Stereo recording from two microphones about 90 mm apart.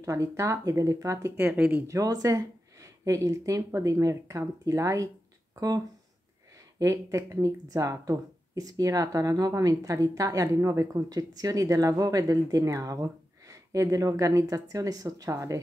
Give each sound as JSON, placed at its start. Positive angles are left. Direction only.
{"t": 0.0, "sound": "speech", "side_deg": -35}
{"t": 1.4, "sound": "speech", "side_deg": -20}
{"t": 1.9, "sound": "speech", "side_deg": -40}
{"t": 6.8, "sound": "speech", "side_deg": -35}